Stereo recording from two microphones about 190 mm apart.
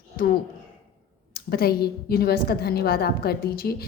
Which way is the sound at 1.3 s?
55° left (ahead or behind).